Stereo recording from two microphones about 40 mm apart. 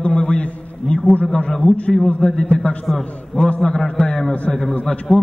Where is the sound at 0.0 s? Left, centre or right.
Left.